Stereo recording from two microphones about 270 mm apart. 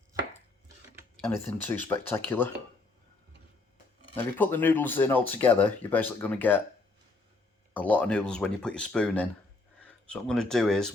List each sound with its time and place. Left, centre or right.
1.3 s speech: centre
4.1 s speech: centre
7.7 s speech: centre